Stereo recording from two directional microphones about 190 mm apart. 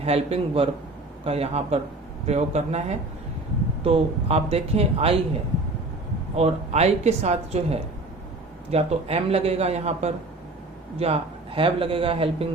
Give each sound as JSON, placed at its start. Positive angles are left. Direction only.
{"t": 0.0, "sound": "speech", "side_deg": -30}
{"t": 3.8, "sound": "speech", "side_deg": -30}
{"t": 6.3, "sound": "speech", "side_deg": -35}